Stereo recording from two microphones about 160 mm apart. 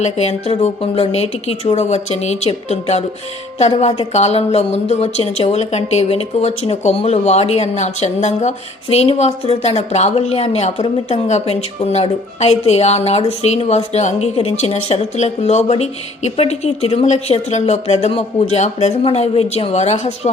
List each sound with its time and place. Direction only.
0.0 s a woman's voice: 45° left (ahead or behind)